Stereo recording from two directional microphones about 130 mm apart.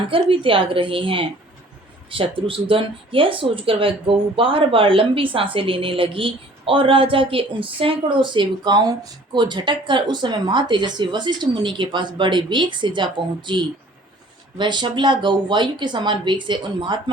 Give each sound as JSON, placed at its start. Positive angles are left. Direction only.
{"t": 0.1, "sound": "a woman's voice", "side_deg": -40}